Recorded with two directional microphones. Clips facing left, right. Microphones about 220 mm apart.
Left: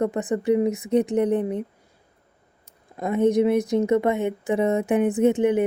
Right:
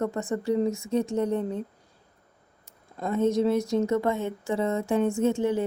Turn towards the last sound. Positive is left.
turn(degrees=20)  # may be behind; listen again after turning